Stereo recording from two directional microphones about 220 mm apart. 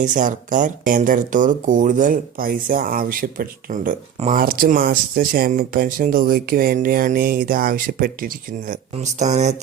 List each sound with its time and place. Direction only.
0.0 s speech: 35° right (ahead or behind)